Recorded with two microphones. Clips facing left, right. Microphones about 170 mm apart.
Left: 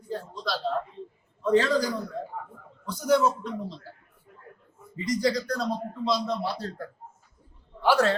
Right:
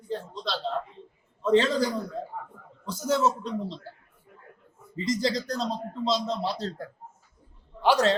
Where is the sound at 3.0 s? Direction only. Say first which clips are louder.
Left 2 dB; 25° right (ahead or behind).